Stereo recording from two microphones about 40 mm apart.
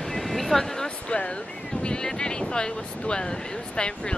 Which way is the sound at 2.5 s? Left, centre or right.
Left.